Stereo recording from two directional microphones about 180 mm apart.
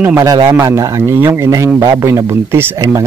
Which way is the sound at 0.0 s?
15° right (ahead or behind).